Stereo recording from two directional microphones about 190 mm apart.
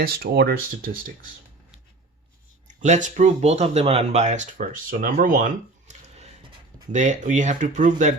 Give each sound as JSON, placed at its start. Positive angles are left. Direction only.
{"t": 0.0, "sound": "speech", "side_deg": -50}
{"t": 2.6, "sound": "speech", "side_deg": -40}